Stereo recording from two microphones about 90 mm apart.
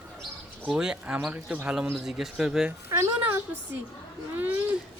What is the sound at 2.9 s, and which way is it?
Speech, 35° right (ahead or behind).